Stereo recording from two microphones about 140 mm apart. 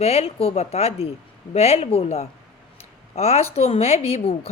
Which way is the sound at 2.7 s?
45° left (ahead or behind).